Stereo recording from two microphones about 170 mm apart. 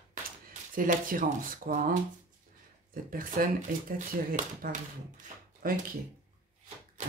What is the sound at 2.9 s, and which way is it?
Speech, 55° right (ahead or behind).